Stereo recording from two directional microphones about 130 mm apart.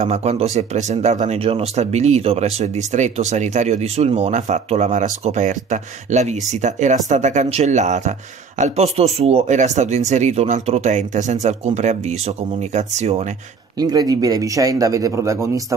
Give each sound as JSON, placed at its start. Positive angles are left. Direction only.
{"t": 0.0, "sound": "speech", "side_deg": -60}
{"t": 1.4, "sound": "speech", "side_deg": -50}
{"t": 13.7, "sound": "speech", "side_deg": -30}